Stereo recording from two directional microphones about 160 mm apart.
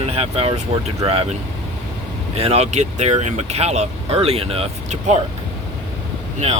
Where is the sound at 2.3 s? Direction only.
40° right (ahead or behind).